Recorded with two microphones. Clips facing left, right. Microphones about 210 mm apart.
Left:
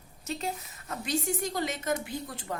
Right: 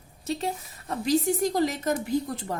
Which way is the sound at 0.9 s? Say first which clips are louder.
Right 7 dB; 35° right (ahead or behind).